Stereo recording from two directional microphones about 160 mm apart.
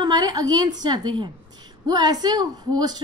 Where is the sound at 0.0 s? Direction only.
25° right (ahead or behind).